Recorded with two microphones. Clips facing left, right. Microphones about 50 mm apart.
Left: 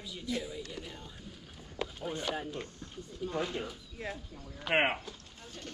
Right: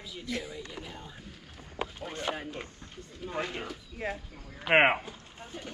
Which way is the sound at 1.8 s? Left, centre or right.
Right.